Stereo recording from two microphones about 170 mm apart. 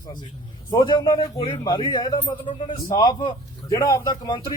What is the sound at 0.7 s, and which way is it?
A man's voice, 25° left (ahead or behind).